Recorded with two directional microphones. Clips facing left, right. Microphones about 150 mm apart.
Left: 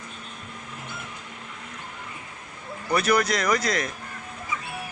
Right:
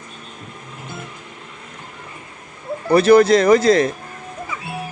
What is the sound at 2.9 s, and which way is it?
Speech, 30° right (ahead or behind).